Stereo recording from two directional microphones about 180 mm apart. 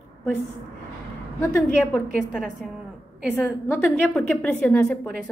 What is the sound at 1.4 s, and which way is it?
Speech, 15° left (ahead or behind).